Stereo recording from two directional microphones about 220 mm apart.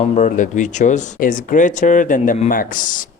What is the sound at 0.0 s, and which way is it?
Speech, 35° left (ahead or behind).